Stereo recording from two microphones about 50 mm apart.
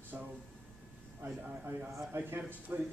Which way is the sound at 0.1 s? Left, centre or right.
Right.